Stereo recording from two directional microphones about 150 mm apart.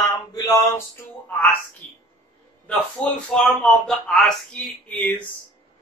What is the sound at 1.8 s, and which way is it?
Speech, 10° left (ahead or behind).